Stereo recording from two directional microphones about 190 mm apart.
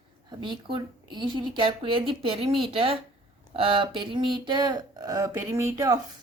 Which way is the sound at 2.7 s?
30° right (ahead or behind).